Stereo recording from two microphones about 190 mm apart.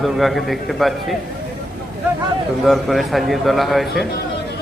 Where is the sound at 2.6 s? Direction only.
Centre (ahead or behind).